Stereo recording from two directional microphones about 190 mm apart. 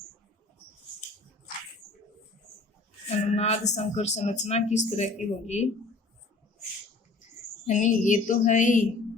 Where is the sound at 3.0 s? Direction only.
35° left (ahead or behind).